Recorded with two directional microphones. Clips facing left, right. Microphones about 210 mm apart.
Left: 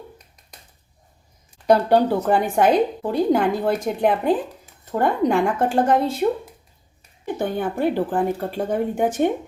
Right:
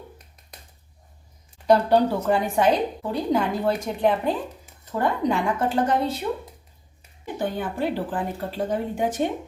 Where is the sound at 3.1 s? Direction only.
55° left (ahead or behind).